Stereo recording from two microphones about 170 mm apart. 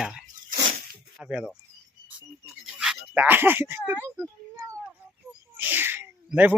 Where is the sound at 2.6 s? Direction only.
5° right (ahead or behind).